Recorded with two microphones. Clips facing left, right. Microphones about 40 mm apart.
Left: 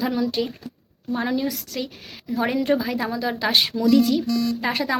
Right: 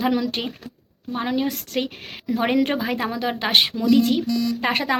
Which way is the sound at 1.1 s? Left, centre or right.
Right.